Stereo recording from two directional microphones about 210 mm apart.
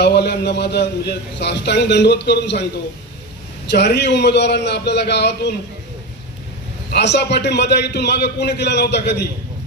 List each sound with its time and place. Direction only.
0.0 s a man's voice: 55° left (ahead or behind)
3.7 s a man's voice: 55° left (ahead or behind)
6.9 s a man's voice: 55° left (ahead or behind)